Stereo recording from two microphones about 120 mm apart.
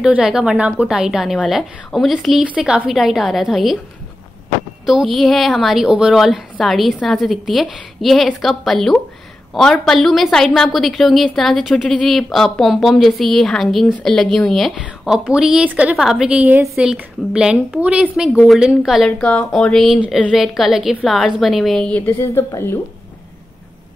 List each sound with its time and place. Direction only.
0.0 s a woman's voice: 5° right (ahead or behind)
4.8 s a woman's voice: centre (ahead or behind)
19.0 s speech: 10° left (ahead or behind)
20.0 s a woman's voice: 10° right (ahead or behind); by 22.1 s 10° left (ahead or behind)
22.2 s a woman's voice: 20° left (ahead or behind)